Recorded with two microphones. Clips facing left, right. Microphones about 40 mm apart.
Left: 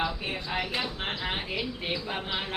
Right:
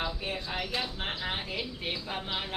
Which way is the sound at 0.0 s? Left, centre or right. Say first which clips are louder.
Left 3 dB; left.